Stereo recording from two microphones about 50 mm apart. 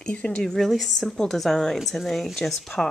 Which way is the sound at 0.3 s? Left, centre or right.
Centre.